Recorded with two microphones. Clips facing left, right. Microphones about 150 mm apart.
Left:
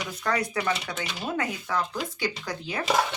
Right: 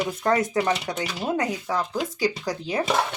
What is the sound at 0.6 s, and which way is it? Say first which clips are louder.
Speech: right 5 dB; 40° right (ahead or behind).